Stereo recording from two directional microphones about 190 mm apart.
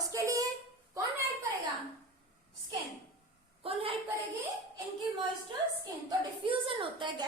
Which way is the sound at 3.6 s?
30° right (ahead or behind).